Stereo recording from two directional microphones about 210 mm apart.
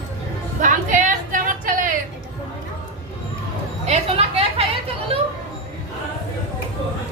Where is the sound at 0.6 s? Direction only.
35° right (ahead or behind).